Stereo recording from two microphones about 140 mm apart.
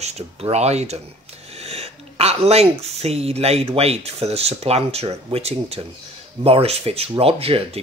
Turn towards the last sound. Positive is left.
turn(degrees=-45)  # may be behind; listen again after turning